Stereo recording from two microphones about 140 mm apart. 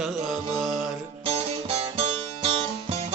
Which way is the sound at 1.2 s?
45° right (ahead or behind).